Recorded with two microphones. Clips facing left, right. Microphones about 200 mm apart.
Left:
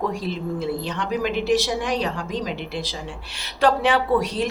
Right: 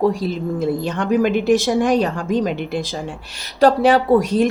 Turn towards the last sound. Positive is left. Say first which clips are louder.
# right 6 dB
turn(degrees=-45)  # may be behind; listen again after turning